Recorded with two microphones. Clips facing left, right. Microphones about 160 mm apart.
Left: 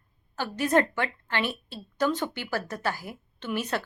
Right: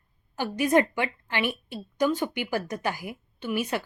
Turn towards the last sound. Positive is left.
turn(degrees=-10)  # may be behind; listen again after turning